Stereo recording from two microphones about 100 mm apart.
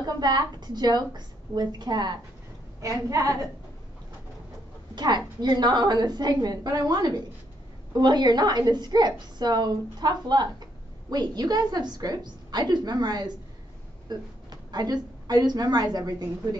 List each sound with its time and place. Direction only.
0.0 s a woman's voice: 45° right (ahead or behind)
2.8 s a woman's voice: 35° right (ahead or behind)
4.9 s a woman's voice: 45° right (ahead or behind)